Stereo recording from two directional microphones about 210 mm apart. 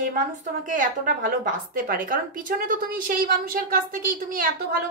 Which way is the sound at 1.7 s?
40° right (ahead or behind).